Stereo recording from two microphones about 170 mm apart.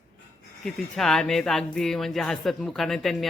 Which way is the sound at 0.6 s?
Centre (ahead or behind).